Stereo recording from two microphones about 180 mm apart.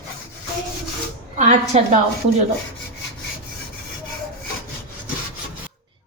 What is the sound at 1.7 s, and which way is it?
Speech, 35° right (ahead or behind).